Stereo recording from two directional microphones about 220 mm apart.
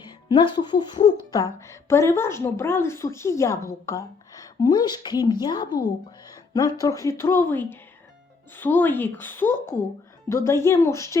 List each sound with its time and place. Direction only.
0.0 s speech: 20° left (ahead or behind)